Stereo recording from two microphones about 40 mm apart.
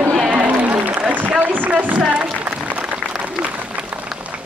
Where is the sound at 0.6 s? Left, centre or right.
Right.